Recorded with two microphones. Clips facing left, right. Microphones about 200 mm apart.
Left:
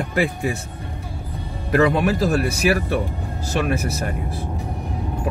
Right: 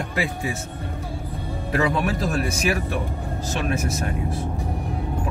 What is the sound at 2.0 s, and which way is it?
Speech, centre (ahead or behind).